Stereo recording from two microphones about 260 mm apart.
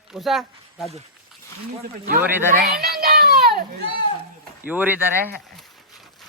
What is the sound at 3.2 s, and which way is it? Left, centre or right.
Children playing, right.